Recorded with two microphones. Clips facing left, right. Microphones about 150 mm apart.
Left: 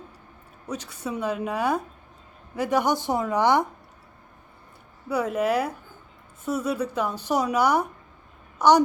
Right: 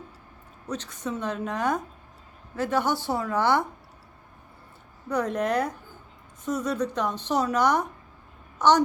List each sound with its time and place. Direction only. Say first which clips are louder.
0.7 s a woman's voice: even; 10° left (ahead or behind)
5.0 s a woman's voice: left 2 dB; 5° left (ahead or behind)